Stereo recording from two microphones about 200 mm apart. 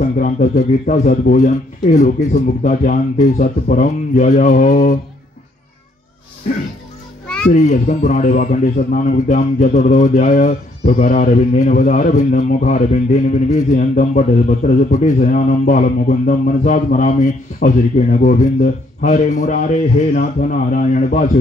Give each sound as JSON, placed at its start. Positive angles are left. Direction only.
{"t": 0.2, "sound": "a man's voice", "side_deg": 40}
{"t": 7.5, "sound": "a man's voice", "side_deg": 35}